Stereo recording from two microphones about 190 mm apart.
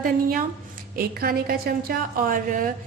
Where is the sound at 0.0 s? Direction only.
45° right (ahead or behind).